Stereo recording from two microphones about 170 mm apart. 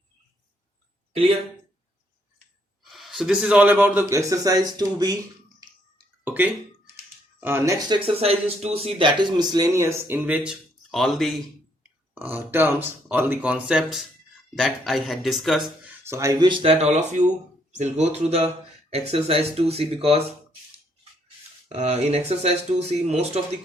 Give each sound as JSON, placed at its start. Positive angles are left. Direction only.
{"t": 1.1, "sound": "speech", "side_deg": -35}
{"t": 2.9, "sound": "a man's voice", "side_deg": 0}
{"t": 8.0, "sound": "speech", "side_deg": -35}
{"t": 12.1, "sound": "speech", "side_deg": -10}
{"t": 16.0, "sound": "speech", "side_deg": -15}
{"t": 16.5, "sound": "speech", "side_deg": -40}
{"t": 21.7, "sound": "speech", "side_deg": -40}